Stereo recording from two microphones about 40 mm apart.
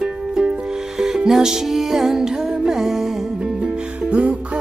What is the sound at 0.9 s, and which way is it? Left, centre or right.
Music, centre.